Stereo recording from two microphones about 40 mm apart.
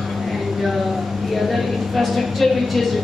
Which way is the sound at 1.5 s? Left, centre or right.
Centre.